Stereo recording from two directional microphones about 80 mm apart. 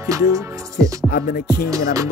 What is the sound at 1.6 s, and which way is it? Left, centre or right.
Music, right.